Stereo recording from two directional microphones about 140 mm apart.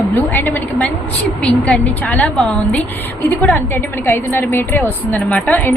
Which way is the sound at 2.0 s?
5° left (ahead or behind).